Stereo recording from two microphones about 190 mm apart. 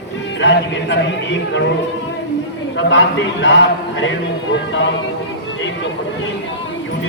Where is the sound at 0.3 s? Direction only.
70° left (ahead or behind).